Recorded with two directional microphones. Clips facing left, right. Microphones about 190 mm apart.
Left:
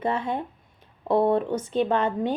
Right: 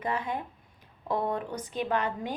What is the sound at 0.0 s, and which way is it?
Speech, 30° left (ahead or behind).